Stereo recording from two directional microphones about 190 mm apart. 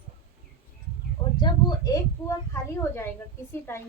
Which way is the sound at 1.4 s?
20° left (ahead or behind).